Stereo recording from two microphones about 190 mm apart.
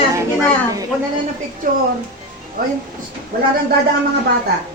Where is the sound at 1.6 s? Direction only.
45° right (ahead or behind).